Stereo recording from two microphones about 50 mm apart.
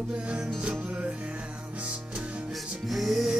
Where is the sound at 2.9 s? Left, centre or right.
Centre.